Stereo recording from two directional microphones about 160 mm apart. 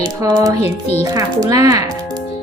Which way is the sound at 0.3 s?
25° right (ahead or behind).